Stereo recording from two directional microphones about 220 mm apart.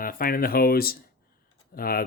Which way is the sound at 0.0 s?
40° left (ahead or behind).